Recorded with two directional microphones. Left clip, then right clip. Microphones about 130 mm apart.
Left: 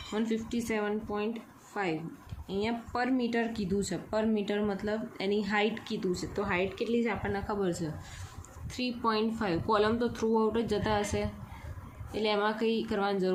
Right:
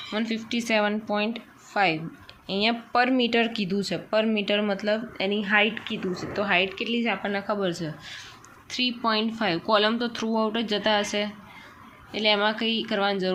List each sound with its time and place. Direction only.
0.1 s speech: 10° right (ahead or behind)
0.7 s speech: 45° right (ahead or behind); by 6.1 s 15° right (ahead or behind)
6.1 s speech: 25° right (ahead or behind)